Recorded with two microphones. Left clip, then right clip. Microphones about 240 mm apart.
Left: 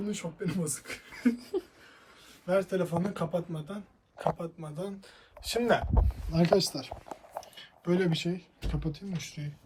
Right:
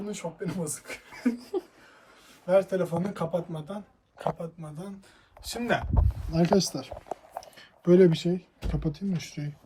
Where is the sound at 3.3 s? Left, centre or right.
Centre.